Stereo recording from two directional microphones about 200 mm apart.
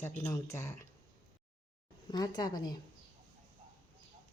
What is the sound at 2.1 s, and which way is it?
Speech, 20° left (ahead or behind).